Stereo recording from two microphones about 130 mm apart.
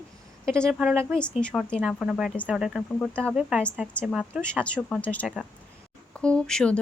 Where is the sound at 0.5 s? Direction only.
20° right (ahead or behind).